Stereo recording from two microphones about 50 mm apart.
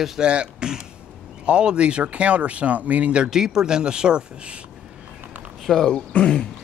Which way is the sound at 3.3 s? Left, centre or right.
Centre.